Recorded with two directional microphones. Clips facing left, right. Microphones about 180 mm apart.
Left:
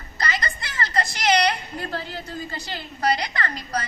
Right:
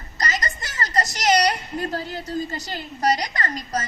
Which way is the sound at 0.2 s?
40° right (ahead or behind).